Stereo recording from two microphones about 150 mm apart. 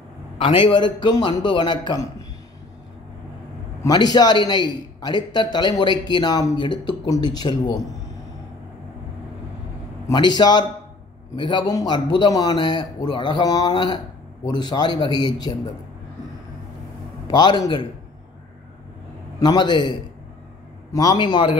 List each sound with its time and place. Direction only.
0.4 s a man's voice: 35° left (ahead or behind)
3.8 s a man's voice: 25° left (ahead or behind)
10.0 s a man's voice: 30° left (ahead or behind)
17.3 s a man's voice: 30° left (ahead or behind)
19.4 s a man's voice: 30° left (ahead or behind)